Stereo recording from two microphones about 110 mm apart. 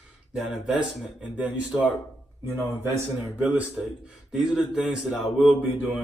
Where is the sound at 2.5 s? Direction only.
25° right (ahead or behind).